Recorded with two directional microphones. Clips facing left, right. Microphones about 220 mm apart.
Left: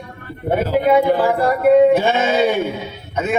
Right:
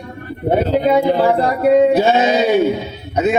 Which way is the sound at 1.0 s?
20° right (ahead or behind).